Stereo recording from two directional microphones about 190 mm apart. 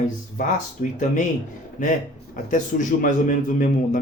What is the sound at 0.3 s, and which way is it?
A man's voice, 40° left (ahead or behind).